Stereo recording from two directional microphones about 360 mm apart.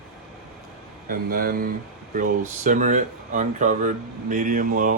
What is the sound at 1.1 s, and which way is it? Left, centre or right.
Speech, right.